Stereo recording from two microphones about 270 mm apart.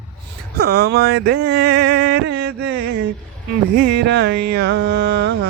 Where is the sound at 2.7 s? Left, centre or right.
Right.